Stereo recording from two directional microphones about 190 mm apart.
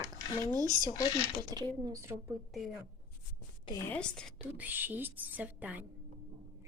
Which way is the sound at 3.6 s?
15° left (ahead or behind).